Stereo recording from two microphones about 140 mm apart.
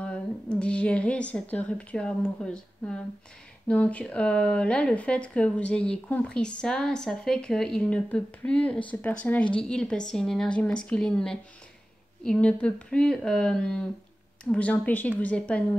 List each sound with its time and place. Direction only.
0.0 s a woman's voice: 10° left (ahead or behind)